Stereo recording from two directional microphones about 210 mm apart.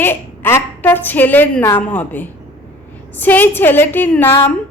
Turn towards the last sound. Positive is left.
turn(degrees=10)  # may be behind; listen again after turning